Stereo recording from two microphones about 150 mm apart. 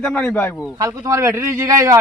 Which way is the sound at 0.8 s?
25° right (ahead or behind).